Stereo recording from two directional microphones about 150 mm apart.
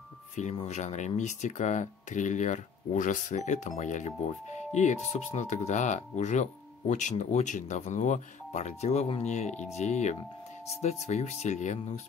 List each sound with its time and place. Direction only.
0.4 s speech: 45° left (ahead or behind)